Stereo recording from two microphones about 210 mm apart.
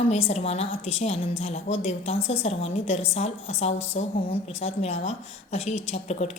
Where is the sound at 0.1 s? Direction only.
30° left (ahead or behind).